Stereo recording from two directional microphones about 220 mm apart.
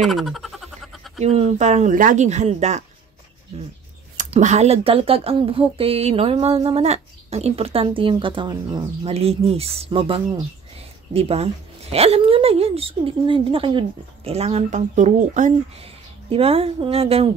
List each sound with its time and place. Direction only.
0.0 s frog: centre (ahead or behind)
1.2 s speech: 30° right (ahead or behind)
4.2 s speech: 30° right (ahead or behind)